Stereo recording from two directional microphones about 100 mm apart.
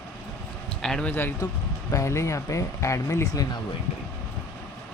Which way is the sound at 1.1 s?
20° left (ahead or behind).